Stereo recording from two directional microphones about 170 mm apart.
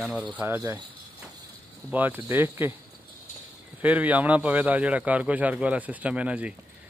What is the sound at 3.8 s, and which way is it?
A man's voice, 10° right (ahead or behind).